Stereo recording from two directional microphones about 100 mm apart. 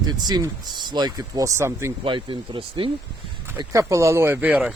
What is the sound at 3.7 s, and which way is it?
Speech, 30° right (ahead or behind).